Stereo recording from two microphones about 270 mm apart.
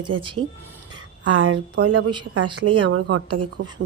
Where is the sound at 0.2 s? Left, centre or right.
Centre.